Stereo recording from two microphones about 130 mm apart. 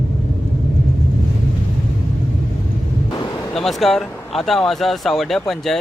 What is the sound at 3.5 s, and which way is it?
Speech, centre (ahead or behind).